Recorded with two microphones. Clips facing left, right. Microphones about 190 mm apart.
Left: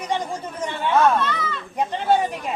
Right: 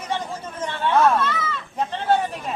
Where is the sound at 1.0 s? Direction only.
Centre (ahead or behind).